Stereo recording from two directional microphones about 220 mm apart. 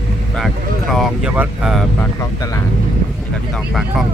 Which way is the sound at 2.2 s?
15° left (ahead or behind).